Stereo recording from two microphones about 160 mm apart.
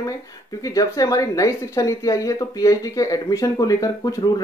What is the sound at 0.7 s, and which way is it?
Speech, 20° left (ahead or behind).